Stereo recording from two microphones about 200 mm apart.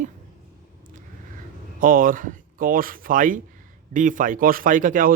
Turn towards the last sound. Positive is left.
turn(degrees=-40)  # may be behind; listen again after turning